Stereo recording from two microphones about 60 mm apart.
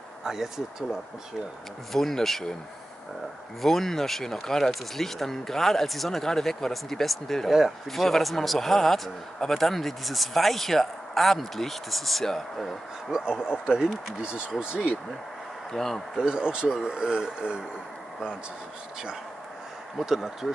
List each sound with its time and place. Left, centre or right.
0.2 s speech: centre
1.9 s a man's voice: centre
3.6 s a man's voice: centre
13.1 s speech: centre
15.7 s a man's voice: centre
16.2 s speech: centre
20.0 s a man's voice: centre